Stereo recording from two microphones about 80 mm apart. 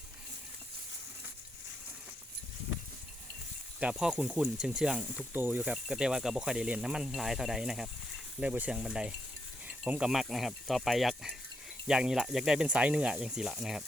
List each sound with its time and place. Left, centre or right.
3.8 s speech: centre
5.3 s speech: right
5.7 s speech: centre
8.4 s speech: centre
9.6 s insect: centre
10.1 s speech: centre